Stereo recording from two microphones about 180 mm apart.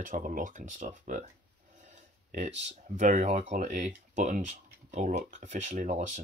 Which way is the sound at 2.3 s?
40° right (ahead or behind).